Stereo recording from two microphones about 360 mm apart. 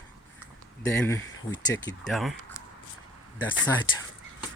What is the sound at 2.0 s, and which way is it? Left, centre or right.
Speech, centre.